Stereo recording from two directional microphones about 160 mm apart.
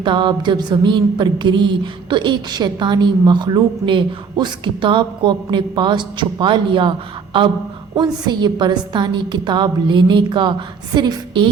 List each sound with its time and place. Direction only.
0.0 s music: 30° right (ahead or behind)
7.9 s music: 25° right (ahead or behind)